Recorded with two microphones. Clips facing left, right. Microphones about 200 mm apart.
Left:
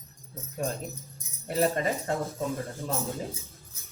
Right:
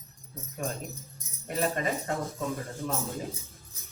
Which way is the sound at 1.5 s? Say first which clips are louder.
Left 3 dB; 30° left (ahead or behind).